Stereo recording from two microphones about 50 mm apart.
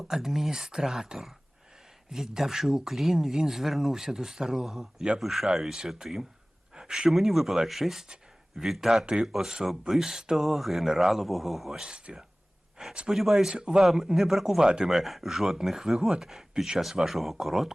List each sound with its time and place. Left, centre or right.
0.0 s speech: centre
5.2 s speech: centre
11.8 s speech: centre
13.1 s speech: centre
14.8 s speech: centre